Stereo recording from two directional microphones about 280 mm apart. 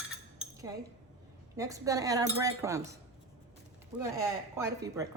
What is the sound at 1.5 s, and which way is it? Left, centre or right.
Speech, centre.